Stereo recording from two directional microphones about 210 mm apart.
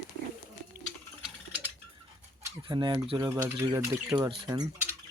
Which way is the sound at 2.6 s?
20° right (ahead or behind).